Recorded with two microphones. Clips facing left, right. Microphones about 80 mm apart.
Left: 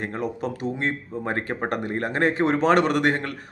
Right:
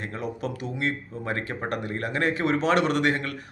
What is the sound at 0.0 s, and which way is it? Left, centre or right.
Speech, left.